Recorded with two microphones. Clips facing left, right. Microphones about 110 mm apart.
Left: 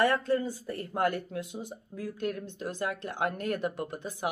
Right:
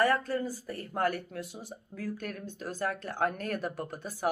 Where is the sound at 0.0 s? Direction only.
25° left (ahead or behind).